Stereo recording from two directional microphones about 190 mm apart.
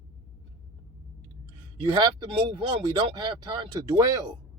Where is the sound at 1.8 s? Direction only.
25° right (ahead or behind).